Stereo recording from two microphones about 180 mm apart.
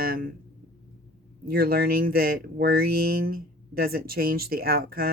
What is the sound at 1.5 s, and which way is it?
Speech, 55° right (ahead or behind).